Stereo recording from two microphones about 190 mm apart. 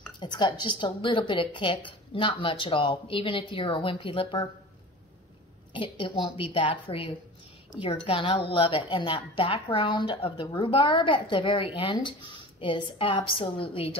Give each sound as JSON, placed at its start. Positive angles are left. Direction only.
{"t": 0.2, "sound": "a woman's voice", "side_deg": 25}
{"t": 5.7, "sound": "a woman's voice", "side_deg": 25}